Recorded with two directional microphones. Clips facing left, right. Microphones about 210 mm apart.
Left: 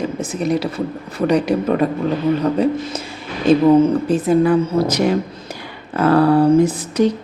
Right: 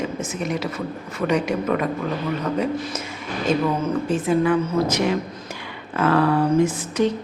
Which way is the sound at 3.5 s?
35° left (ahead or behind).